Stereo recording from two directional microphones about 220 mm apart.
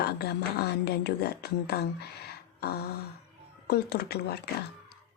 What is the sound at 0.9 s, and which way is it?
Speech, 45° left (ahead or behind).